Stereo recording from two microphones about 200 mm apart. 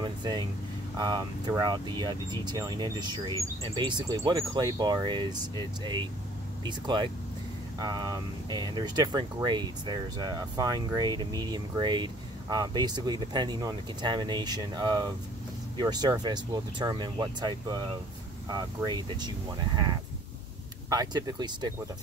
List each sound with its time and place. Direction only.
0.0 s air conditioning: 20° right (ahead or behind)
0.9 s speech: 20° right (ahead or behind)